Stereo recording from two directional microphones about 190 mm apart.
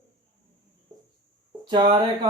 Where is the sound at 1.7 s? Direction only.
25° right (ahead or behind).